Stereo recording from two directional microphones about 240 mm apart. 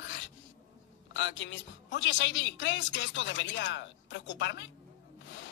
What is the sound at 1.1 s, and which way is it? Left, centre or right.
A man's voice, left.